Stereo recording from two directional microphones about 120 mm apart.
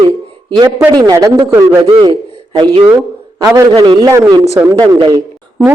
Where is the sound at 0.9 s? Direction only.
30° right (ahead or behind).